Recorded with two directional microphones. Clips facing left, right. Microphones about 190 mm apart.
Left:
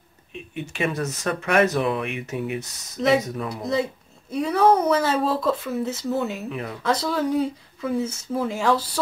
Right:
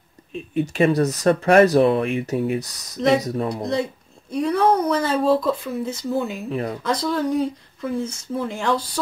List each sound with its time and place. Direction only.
0.3 s speech: 35° right (ahead or behind)
3.0 s speech: centre (ahead or behind)
6.5 s speech: 40° right (ahead or behind)
6.8 s speech: 5° left (ahead or behind)